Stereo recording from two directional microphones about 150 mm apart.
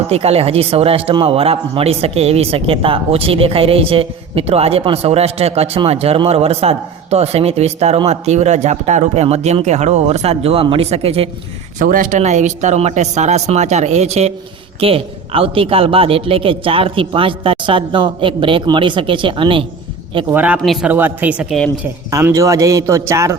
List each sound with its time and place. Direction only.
0.1 s speech: 40° right (ahead or behind)
11.8 s speech: 60° right (ahead or behind); by 19.6 s 35° right (ahead or behind)
20.3 s speech: 10° right (ahead or behind)
22.1 s a man's voice: 20° right (ahead or behind)